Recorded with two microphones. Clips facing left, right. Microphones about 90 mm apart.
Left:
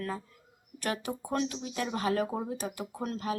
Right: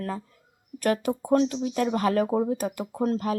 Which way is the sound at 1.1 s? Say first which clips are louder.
Right 11 dB; 35° right (ahead or behind).